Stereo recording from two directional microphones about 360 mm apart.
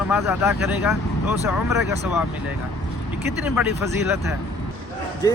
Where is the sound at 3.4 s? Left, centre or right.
Centre.